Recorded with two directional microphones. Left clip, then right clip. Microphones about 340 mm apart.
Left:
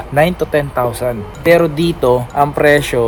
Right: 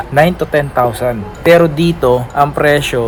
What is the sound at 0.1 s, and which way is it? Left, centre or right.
Speech, centre.